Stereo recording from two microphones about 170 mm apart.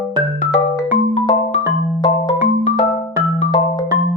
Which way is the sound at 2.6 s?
45° left (ahead or behind).